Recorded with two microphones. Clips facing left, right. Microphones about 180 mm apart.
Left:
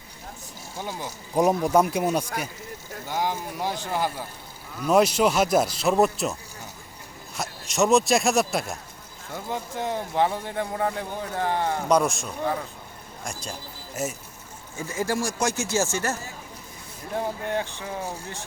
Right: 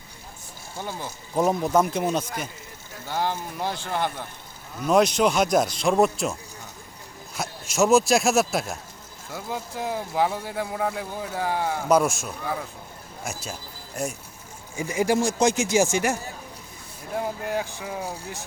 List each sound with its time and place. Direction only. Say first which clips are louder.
0.8 s speech: even; 15° left (ahead or behind)
7.3 s a man's voice: right 1 dB; centre (ahead or behind)
14.8 s speech: right 4 dB; 15° right (ahead or behind)
17.2 s speech: even; 5° right (ahead or behind)